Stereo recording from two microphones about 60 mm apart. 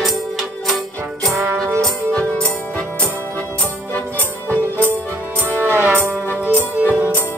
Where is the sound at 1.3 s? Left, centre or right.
Right.